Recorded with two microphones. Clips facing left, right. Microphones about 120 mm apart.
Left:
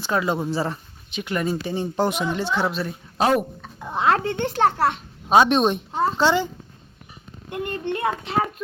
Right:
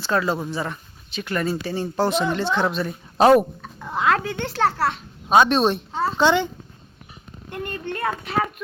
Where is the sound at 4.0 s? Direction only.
25° left (ahead or behind).